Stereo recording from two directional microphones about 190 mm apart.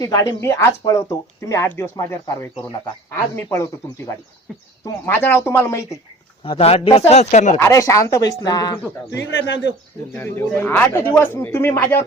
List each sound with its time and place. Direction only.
0.0 s speech: 15° left (ahead or behind)
6.4 s speech: 30° left (ahead or behind)
7.6 s speech: 15° left (ahead or behind)
10.3 s speech: 10° left (ahead or behind)